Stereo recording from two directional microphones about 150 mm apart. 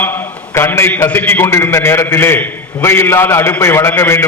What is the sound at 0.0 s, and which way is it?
A man's voice, 15° left (ahead or behind).